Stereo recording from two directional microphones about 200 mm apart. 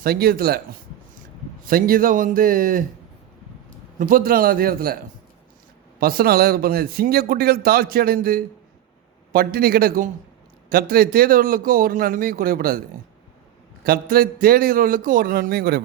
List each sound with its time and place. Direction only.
0.0 s a man's voice: 50° right (ahead or behind)
1.6 s a man's voice: 45° right (ahead or behind)
3.9 s a man's voice: 45° right (ahead or behind)
6.0 s a man's voice: 50° right (ahead or behind)
13.8 s a man's voice: 50° right (ahead or behind)